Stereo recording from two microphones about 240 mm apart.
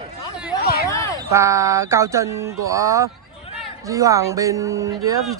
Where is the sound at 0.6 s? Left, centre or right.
Left.